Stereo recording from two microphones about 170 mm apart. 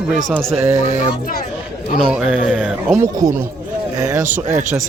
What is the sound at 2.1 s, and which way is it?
Speech, 5° right (ahead or behind).